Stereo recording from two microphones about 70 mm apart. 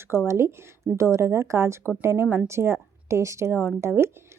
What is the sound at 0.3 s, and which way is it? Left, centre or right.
A woman's voice, right.